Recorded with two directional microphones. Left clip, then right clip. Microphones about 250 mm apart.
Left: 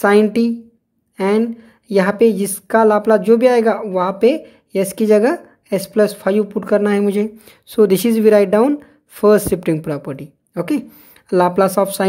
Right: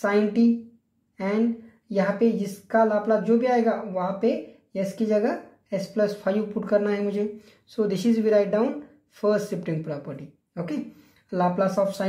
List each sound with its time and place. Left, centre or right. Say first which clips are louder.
0.0 s speech: left 9 dB; left